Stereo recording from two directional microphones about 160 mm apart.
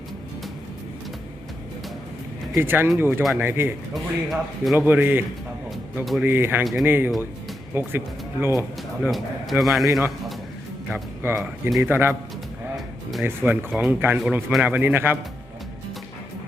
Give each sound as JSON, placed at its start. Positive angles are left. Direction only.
{"t": 2.6, "sound": "a man's voice", "side_deg": -15}
{"t": 3.9, "sound": "a man's voice", "side_deg": 0}
{"t": 4.9, "sound": "a man's voice", "side_deg": -10}
{"t": 6.2, "sound": "a man's voice", "side_deg": -15}
{"t": 9.0, "sound": "speech", "side_deg": 0}
{"t": 9.8, "sound": "a man's voice", "side_deg": -20}
{"t": 12.7, "sound": "music", "side_deg": 0}
{"t": 13.2, "sound": "a man's voice", "side_deg": -15}